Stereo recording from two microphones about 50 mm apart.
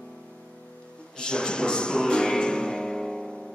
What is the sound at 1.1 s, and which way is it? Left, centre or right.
Music, centre.